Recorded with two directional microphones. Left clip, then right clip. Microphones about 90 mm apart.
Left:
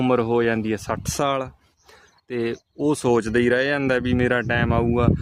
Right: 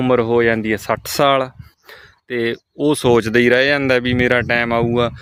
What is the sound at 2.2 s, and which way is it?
Speech, 25° right (ahead or behind).